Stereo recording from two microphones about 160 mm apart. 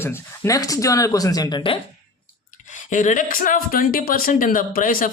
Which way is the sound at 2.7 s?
50° left (ahead or behind).